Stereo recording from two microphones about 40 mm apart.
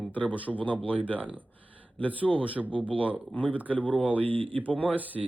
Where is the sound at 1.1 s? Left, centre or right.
Right.